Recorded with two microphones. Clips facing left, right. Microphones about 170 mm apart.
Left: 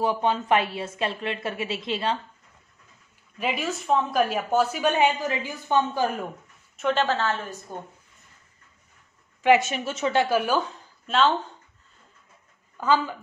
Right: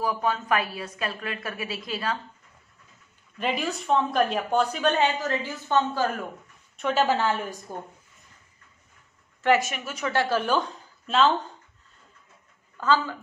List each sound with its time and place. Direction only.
0.0 s a woman's voice: 25° left (ahead or behind)
3.3 s a woman's voice: 5° left (ahead or behind)
6.8 s a woman's voice: 5° right (ahead or behind)
9.6 s a woman's voice: 25° left (ahead or behind)
10.2 s a woman's voice: 10° left (ahead or behind)
12.8 s a woman's voice: 15° left (ahead or behind)